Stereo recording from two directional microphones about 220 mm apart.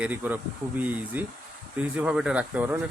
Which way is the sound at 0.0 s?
10° right (ahead or behind).